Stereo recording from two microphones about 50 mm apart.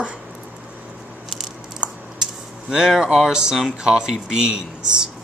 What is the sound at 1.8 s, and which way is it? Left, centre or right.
Typing, centre.